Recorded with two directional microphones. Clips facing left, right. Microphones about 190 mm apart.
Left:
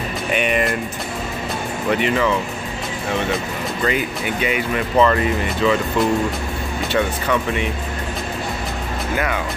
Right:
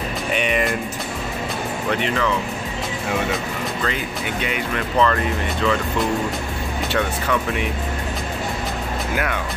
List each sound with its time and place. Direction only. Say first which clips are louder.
0.3 s speech: left 2 dB; centre (ahead or behind)
1.9 s speech: left 4 dB; 5° left (ahead or behind)
3.8 s speech: left 4 dB; 5° left (ahead or behind)
9.1 s speech: left 3 dB; centre (ahead or behind)